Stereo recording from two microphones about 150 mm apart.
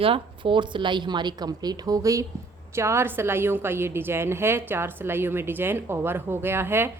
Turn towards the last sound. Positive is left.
turn(degrees=-15)  # may be behind; listen again after turning